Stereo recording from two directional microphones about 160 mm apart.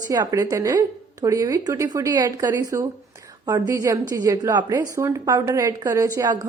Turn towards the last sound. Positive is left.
turn(degrees=-25)  # may be behind; listen again after turning